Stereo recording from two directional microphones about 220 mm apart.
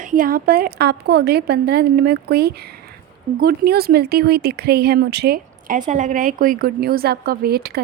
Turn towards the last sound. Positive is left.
turn(degrees=-45)  # may be behind; listen again after turning